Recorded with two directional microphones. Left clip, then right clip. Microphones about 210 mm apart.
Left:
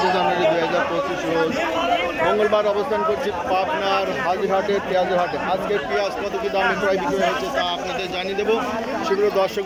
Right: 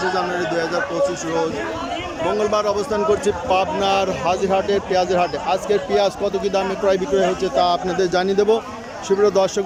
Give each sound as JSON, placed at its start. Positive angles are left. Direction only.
{"t": 2.2, "sound": "a man's voice", "side_deg": -5}